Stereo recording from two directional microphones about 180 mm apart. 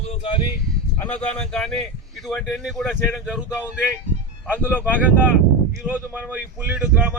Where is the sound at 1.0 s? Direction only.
5° left (ahead or behind).